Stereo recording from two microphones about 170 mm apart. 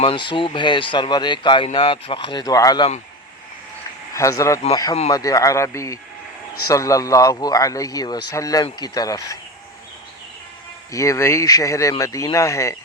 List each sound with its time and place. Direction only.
0.0 s speech: 30° left (ahead or behind)
4.1 s speech: 20° left (ahead or behind)
10.9 s speech: 20° left (ahead or behind)